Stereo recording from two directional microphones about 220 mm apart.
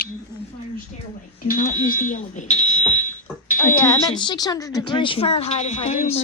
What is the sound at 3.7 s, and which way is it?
A woman's voice, 10° left (ahead or behind).